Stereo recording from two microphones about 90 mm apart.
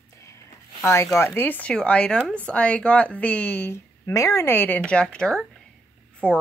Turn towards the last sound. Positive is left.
turn(degrees=10)  # may be behind; listen again after turning